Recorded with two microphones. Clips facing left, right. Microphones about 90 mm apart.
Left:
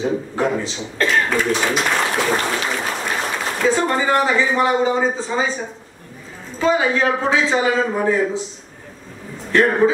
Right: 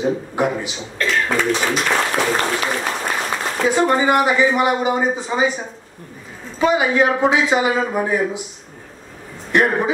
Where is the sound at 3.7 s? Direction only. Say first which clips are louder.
Right 4 dB; 15° right (ahead or behind).